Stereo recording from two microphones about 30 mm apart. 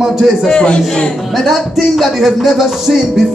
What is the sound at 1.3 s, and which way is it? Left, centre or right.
Music, centre.